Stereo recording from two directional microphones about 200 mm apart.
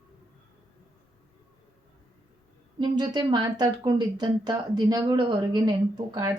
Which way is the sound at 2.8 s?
20° right (ahead or behind).